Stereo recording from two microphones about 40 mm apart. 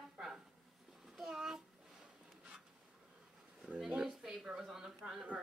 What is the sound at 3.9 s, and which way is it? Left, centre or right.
Speech, right.